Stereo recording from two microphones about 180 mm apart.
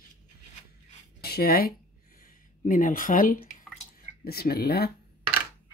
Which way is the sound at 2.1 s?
50° left (ahead or behind).